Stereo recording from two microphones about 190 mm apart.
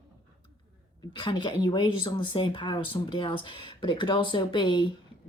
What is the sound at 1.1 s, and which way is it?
Speech, 25° left (ahead or behind).